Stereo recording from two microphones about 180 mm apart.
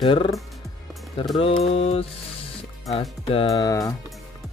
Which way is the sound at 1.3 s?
30° left (ahead or behind).